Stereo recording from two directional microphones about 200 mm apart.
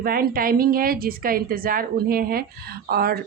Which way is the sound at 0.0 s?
45° right (ahead or behind).